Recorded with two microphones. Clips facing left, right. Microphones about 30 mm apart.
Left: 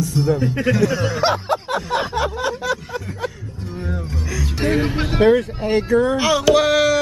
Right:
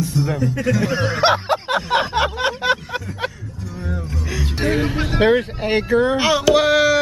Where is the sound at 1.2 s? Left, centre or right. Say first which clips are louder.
Right 4 dB; right.